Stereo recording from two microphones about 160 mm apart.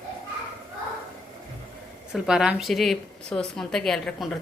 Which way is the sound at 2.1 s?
5° right (ahead or behind).